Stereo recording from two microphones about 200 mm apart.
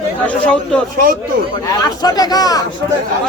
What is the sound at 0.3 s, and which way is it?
Speech, 5° left (ahead or behind).